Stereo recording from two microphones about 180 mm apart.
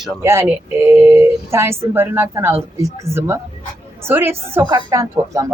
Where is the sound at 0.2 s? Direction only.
15° right (ahead or behind).